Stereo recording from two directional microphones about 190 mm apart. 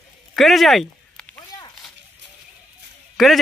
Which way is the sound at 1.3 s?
20° left (ahead or behind).